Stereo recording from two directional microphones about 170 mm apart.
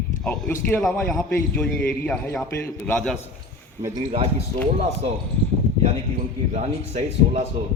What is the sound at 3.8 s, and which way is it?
Speech, 30° right (ahead or behind).